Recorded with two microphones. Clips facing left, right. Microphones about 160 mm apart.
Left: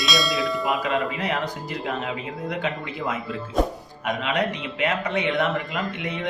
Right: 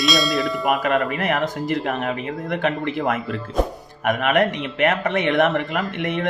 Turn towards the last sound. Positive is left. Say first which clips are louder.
# right 5 dB
turn(degrees=-65)  # may be behind; listen again after turning